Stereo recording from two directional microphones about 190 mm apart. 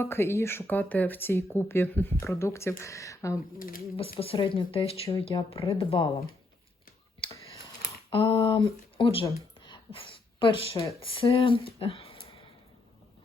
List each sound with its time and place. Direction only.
0.0 s speech: 10° left (ahead or behind)
3.9 s speech: 30° left (ahead or behind)
8.1 s speech: 25° left (ahead or behind)
9.2 s a sound: 25° left (ahead or behind)
11.0 s speech: 30° left (ahead or behind)